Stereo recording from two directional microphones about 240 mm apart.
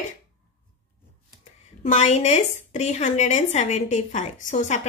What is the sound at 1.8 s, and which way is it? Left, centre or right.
A woman's voice, left.